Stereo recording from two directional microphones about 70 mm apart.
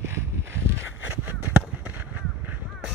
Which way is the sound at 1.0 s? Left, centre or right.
Right.